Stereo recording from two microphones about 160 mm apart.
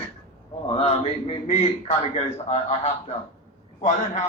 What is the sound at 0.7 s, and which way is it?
A man's voice, 40° left (ahead or behind).